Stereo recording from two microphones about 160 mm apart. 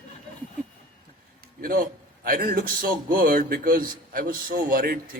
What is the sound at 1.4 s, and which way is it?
A man's voice, 65° right (ahead or behind).